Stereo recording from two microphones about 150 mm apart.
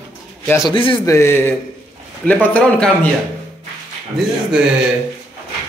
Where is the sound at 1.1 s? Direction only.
15° left (ahead or behind).